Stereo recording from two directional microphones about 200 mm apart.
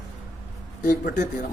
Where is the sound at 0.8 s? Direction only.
40° left (ahead or behind).